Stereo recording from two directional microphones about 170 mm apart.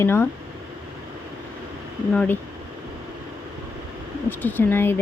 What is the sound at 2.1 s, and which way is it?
Speech, 10° left (ahead or behind).